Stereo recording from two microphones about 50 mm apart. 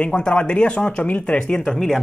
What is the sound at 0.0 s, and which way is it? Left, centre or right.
Speech, left.